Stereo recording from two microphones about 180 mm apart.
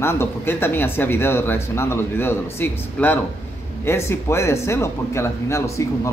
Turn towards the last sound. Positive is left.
turn(degrees=15)  # may be behind; listen again after turning